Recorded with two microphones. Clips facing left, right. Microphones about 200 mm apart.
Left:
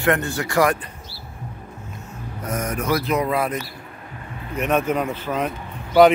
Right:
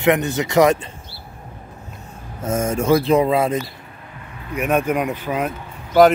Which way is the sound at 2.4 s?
25° right (ahead or behind).